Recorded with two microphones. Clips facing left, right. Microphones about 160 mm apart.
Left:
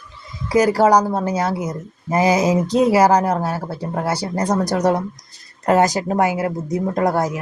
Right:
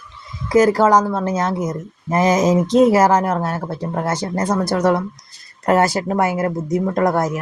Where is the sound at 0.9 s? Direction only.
40° left (ahead or behind).